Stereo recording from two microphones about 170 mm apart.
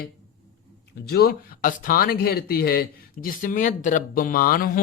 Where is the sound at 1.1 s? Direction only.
65° left (ahead or behind).